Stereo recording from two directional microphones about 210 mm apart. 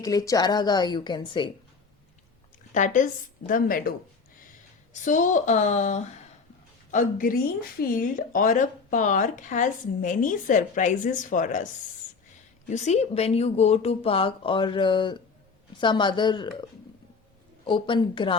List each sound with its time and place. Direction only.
0.0 s speech: 15° left (ahead or behind)
2.7 s speech: 35° left (ahead or behind)
5.0 s speech: 35° left (ahead or behind)
12.6 s speech: 35° left (ahead or behind)
17.7 s speech: 25° left (ahead or behind)